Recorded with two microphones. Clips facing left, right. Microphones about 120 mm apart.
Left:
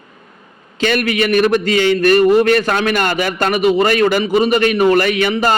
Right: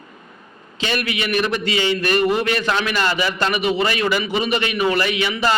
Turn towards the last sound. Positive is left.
turn(degrees=50)  # may be behind; listen again after turning